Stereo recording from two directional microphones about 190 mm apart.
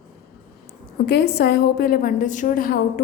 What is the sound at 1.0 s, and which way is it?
A woman's voice, 60° left (ahead or behind).